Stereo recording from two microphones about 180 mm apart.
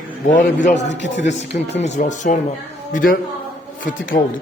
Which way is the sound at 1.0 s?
80° left.